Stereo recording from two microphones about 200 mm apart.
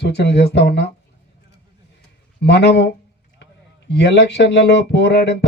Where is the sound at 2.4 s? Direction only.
55° left (ahead or behind).